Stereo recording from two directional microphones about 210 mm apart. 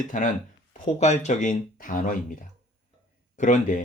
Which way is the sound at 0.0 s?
40° left (ahead or behind).